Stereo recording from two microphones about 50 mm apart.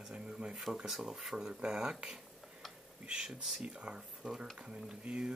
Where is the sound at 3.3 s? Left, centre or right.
Centre.